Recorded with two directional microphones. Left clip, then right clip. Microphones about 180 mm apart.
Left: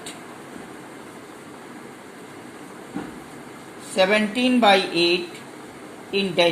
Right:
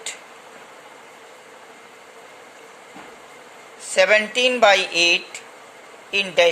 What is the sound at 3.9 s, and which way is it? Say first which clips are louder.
Speech: right 3 dB; 60° right (ahead or behind).